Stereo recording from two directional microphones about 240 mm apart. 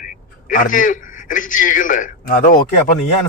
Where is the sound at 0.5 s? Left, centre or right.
Left.